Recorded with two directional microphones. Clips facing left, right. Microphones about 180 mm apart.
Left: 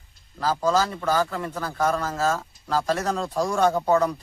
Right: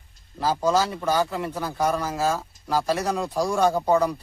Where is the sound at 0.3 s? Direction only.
20° right (ahead or behind).